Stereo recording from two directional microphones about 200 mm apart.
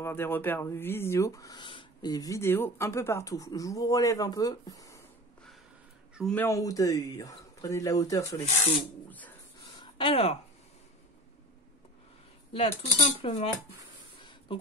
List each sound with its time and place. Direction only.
0.0 s speech: 10° left (ahead or behind)
6.3 s speech: 15° left (ahead or behind)
8.7 s a sound: 10° left (ahead or behind)
9.9 s speech: 25° left (ahead or behind)
12.5 s speech: 30° left (ahead or behind)